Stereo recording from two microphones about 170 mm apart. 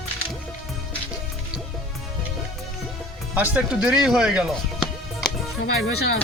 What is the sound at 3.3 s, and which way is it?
Speech, 10° right (ahead or behind).